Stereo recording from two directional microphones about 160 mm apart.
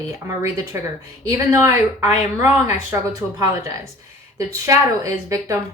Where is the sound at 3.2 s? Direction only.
10° left (ahead or behind).